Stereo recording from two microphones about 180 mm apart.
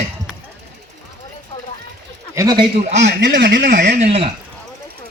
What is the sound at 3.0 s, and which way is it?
Speech, 75° right (ahead or behind).